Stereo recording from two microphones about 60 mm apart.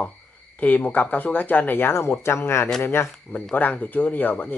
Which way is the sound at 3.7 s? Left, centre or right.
Left.